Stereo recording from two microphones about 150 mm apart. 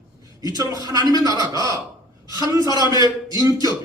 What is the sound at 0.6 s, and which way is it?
A man's voice, 25° right (ahead or behind).